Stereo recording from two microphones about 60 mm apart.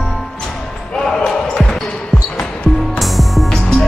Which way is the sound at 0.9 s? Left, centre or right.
Centre.